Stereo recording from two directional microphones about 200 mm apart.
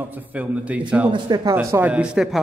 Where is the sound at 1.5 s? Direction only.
10° right (ahead or behind).